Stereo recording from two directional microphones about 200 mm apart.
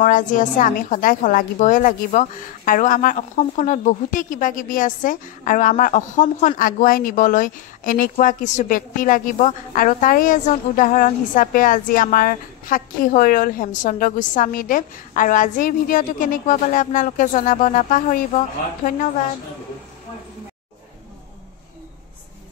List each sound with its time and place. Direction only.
0.0 s a woman's voice: 40° left (ahead or behind)